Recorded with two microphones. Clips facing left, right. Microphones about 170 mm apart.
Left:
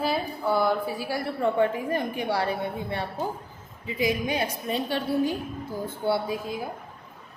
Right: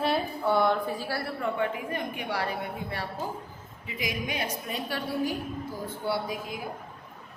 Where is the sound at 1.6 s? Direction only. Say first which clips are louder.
Left 5 dB; 35° left (ahead or behind).